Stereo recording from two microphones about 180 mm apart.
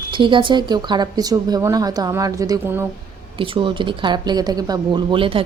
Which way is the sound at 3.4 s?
30° right (ahead or behind).